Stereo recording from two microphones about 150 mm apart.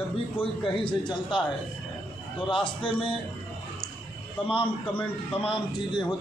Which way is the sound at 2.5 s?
35° left (ahead or behind).